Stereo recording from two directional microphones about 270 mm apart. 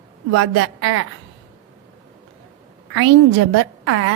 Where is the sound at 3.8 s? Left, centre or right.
Right.